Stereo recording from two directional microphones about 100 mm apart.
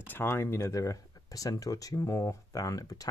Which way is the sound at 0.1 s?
25° left (ahead or behind).